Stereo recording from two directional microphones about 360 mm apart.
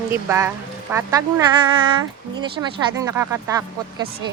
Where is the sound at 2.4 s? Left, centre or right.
Centre.